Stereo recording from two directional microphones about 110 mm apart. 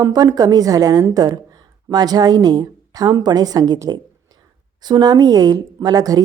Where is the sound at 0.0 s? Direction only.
35° right (ahead or behind).